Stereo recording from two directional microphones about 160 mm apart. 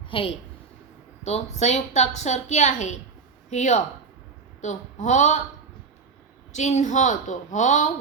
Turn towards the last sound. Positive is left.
turn(degrees=50)  # may be behind; listen again after turning